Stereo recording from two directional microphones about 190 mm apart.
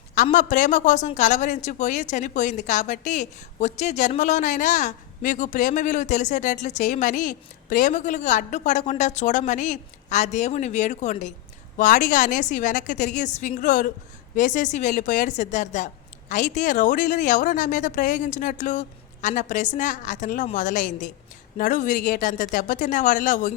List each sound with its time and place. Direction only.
0.1 s a woman's voice: 40° left (ahead or behind)